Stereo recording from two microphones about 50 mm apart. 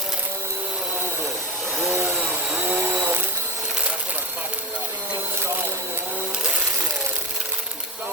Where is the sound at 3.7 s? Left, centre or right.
Centre.